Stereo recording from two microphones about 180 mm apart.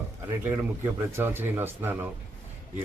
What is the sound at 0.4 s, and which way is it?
Speech, 15° right (ahead or behind).